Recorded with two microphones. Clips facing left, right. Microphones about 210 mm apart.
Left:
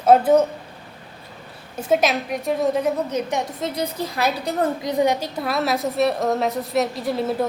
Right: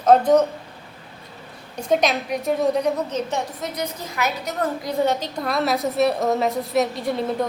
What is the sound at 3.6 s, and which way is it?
Speech, 30° left (ahead or behind).